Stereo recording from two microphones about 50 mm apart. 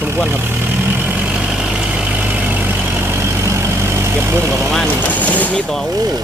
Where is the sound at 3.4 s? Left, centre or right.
Right.